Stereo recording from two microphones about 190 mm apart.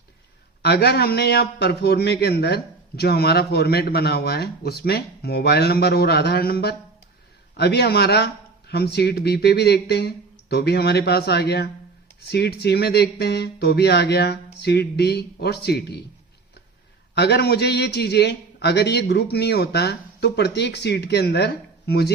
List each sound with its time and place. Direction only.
0.6 s a man's voice: 60° left (ahead or behind)
17.2 s a man's voice: 60° left (ahead or behind)